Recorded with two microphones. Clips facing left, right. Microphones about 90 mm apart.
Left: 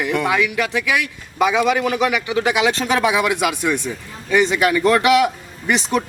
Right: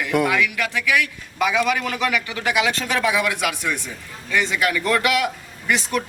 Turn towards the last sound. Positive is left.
turn(degrees=20)  # may be behind; listen again after turning